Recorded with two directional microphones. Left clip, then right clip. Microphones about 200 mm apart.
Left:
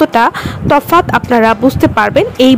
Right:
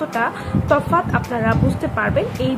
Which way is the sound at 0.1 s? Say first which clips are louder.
Left 10 dB; 55° left (ahead or behind).